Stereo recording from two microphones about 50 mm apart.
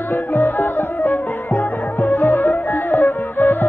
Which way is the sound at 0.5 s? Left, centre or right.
Left.